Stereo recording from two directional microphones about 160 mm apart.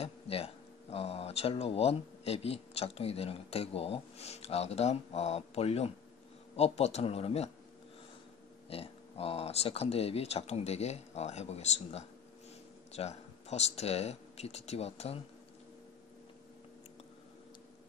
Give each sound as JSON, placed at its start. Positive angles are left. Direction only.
{"t": 0.0, "sound": "speech", "side_deg": 40}
{"t": 8.6, "sound": "speech", "side_deg": 35}